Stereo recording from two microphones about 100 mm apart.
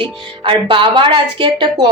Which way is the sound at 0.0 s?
55° right (ahead or behind).